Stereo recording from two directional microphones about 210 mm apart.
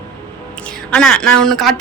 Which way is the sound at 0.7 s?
5° left (ahead or behind).